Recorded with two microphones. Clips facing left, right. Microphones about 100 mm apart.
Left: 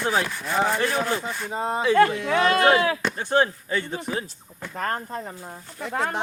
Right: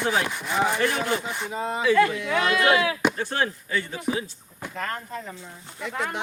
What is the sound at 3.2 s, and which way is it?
Speech, 25° left (ahead or behind).